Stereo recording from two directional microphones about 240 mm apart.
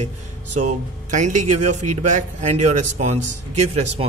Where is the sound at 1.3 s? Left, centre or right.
Right.